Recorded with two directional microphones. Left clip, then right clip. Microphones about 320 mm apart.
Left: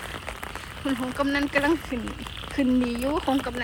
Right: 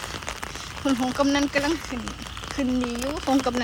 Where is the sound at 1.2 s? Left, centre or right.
Centre.